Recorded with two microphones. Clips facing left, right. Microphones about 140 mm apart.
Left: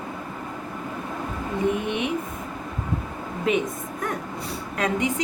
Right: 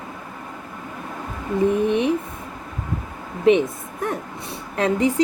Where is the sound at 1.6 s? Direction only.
35° right (ahead or behind).